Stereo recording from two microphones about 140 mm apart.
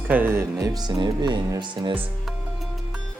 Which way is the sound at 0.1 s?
15° right (ahead or behind).